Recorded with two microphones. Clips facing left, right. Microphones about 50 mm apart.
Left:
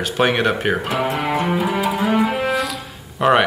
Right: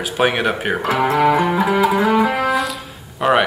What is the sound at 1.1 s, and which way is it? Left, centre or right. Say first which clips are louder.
Music: right 8 dB; right.